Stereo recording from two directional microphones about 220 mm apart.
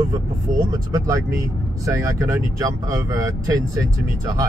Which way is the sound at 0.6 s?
15° right (ahead or behind).